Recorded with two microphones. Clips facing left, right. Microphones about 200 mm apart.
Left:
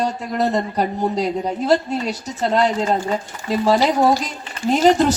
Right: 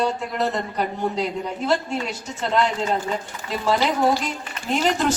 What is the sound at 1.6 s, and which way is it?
Speech, 35° left (ahead or behind).